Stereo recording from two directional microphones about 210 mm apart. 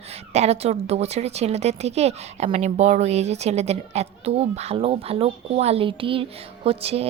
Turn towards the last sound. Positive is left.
turn(degrees=-30)  # may be behind; listen again after turning